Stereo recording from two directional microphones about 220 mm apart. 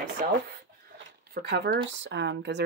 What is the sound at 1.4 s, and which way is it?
Speech, 45° right (ahead or behind).